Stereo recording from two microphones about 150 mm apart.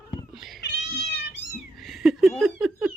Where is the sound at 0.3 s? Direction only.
Centre (ahead or behind).